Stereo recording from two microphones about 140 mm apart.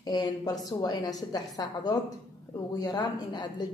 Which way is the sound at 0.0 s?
30° left (ahead or behind).